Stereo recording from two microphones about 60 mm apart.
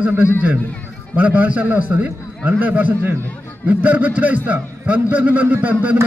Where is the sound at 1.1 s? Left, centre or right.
Right.